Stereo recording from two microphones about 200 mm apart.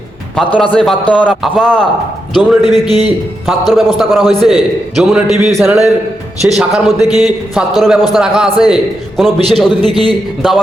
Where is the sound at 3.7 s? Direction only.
Centre (ahead or behind).